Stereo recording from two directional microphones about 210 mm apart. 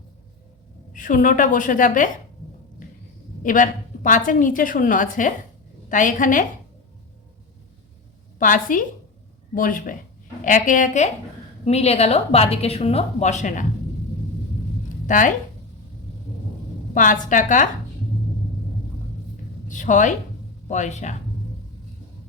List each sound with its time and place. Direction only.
0.9 s a woman's voice: 40° left (ahead or behind)
3.4 s a woman's voice: 40° left (ahead or behind)
8.4 s a woman's voice: 40° left (ahead or behind)
15.0 s speech: 35° left (ahead or behind)
16.9 s a woman's voice: 40° left (ahead or behind)
19.6 s a woman's voice: 35° left (ahead or behind)